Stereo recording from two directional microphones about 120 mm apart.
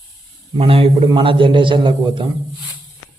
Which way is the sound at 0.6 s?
50° right (ahead or behind).